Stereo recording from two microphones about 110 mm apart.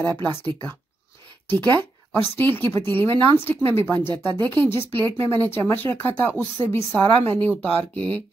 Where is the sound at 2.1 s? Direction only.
15° left (ahead or behind).